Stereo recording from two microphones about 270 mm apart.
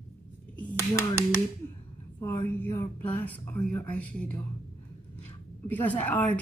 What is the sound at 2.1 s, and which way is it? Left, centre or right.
A woman's voice, centre.